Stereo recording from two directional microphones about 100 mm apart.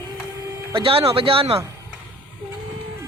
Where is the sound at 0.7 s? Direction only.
70° right (ahead or behind).